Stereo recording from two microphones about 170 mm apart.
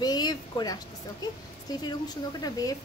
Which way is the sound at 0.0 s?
25° left (ahead or behind).